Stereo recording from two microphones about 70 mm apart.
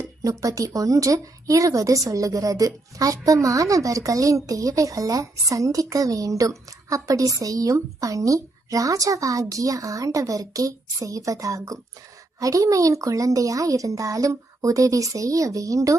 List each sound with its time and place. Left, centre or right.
0.0 s a woman's voice: right